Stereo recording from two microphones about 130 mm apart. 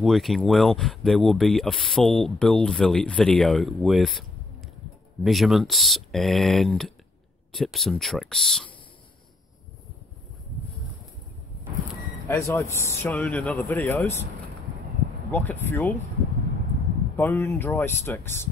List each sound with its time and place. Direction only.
0.0 s speech: centre (ahead or behind)
12.3 s a man's voice: 25° left (ahead or behind)
15.3 s a man's voice: 15° left (ahead or behind)
17.2 s a man's voice: 15° left (ahead or behind)